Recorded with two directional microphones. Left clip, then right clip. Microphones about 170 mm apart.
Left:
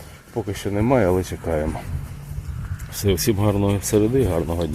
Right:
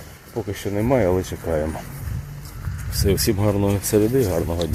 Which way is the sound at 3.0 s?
15° left (ahead or behind).